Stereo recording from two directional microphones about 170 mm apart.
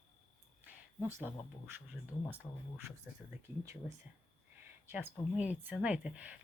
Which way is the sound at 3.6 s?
15° right (ahead or behind).